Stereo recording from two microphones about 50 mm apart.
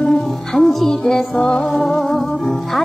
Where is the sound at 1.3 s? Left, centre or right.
Left.